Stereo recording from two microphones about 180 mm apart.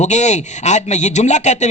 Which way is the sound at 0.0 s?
40° left (ahead or behind).